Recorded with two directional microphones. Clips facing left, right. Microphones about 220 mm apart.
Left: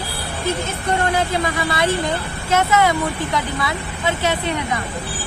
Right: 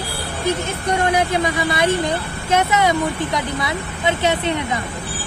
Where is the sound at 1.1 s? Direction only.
20° right (ahead or behind).